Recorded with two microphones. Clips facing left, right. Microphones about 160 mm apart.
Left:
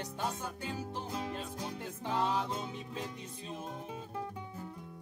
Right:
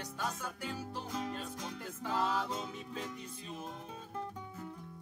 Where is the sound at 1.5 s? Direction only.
25° left (ahead or behind).